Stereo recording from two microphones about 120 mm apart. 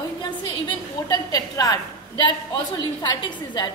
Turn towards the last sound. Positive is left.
turn(degrees=40)  # may be behind; listen again after turning